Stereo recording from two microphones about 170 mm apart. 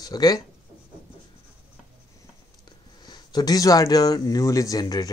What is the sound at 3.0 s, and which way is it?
Speech, 25° left (ahead or behind).